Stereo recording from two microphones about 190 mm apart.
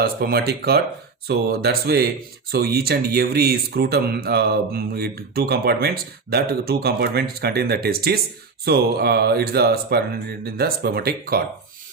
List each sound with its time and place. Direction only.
0.0 s speech: 55° right (ahead or behind)